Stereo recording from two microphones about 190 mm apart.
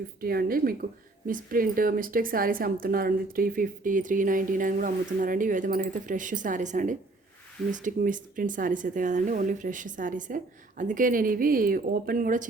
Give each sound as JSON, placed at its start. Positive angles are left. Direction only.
{"t": 0.2, "sound": "a woman's voice", "side_deg": -50}